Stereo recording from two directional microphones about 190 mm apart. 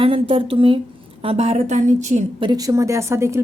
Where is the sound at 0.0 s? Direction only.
30° right (ahead or behind).